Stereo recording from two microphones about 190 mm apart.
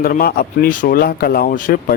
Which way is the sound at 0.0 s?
50° left (ahead or behind).